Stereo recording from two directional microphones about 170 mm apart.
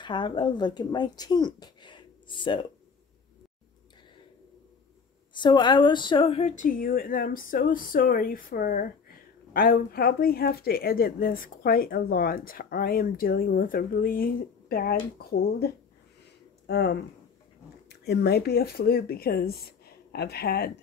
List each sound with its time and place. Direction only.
0.0 s speech: 25° left (ahead or behind)
5.3 s speech: 25° left (ahead or behind); by 20.7 s 70° left (ahead or behind)